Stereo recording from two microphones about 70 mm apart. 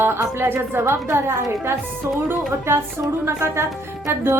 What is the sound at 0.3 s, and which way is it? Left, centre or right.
A woman's voice, right.